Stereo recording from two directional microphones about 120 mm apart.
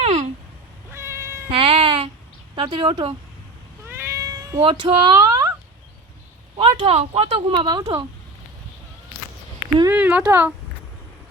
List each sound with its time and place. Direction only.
0.0 s a sound: 70° right (ahead or behind)
0.9 s cat: 25° right (ahead or behind)
1.5 s meow: 50° right (ahead or behind)
2.6 s speech: 45° right (ahead or behind)
3.8 s cat: 20° right (ahead or behind)
4.6 s speech: 45° right (ahead or behind)
6.6 s speech: 55° right (ahead or behind); by 7.9 s 40° right (ahead or behind)
9.9 s speech: 10° right (ahead or behind)